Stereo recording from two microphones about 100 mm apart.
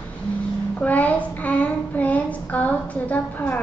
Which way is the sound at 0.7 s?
15° left (ahead or behind).